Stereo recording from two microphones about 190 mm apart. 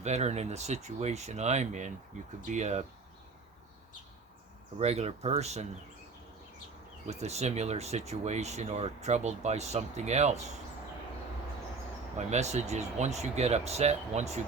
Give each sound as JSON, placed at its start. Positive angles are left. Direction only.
{"t": 0.0, "sound": "speech", "side_deg": -35}
{"t": 4.8, "sound": "speech", "side_deg": -35}
{"t": 7.1, "sound": "speech", "side_deg": -35}
{"t": 12.1, "sound": "speech", "side_deg": -35}